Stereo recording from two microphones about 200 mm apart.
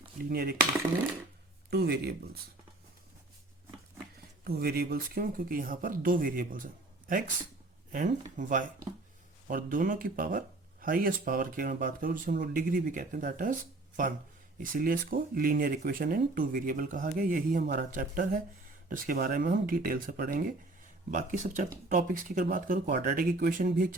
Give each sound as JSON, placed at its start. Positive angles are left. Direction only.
{"t": 0.3, "sound": "speech", "side_deg": -50}
{"t": 1.7, "sound": "speech", "side_deg": -55}
{"t": 4.4, "sound": "speech", "side_deg": -50}
{"t": 8.4, "sound": "speech", "side_deg": -40}